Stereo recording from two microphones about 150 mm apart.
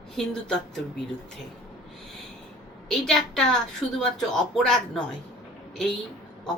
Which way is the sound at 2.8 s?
5° left (ahead or behind).